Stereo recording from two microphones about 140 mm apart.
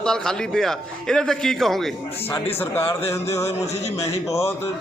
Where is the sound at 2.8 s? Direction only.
20° left (ahead or behind).